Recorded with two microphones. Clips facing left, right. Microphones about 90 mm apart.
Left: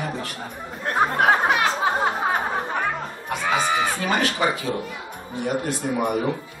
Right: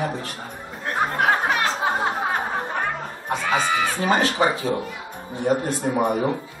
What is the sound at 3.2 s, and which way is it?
Speech, 30° right (ahead or behind).